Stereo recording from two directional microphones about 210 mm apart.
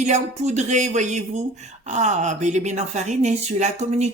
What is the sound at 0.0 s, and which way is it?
Speech, 35° right (ahead or behind).